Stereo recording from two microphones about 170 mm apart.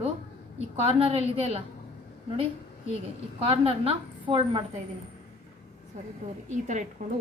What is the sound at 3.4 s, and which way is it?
A woman's voice, 35° right (ahead or behind).